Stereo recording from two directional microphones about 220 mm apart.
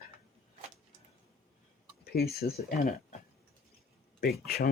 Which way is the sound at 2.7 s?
40° left (ahead or behind).